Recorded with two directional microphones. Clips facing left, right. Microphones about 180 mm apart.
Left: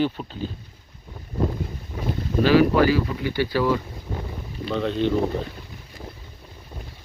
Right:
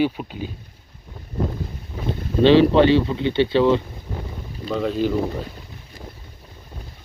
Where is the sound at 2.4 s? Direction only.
25° right (ahead or behind).